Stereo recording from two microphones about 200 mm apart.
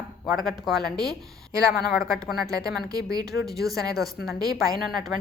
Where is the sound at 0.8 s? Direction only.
20° right (ahead or behind).